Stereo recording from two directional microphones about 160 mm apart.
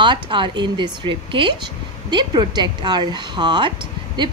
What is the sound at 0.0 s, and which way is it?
A woman's voice, 30° right (ahead or behind).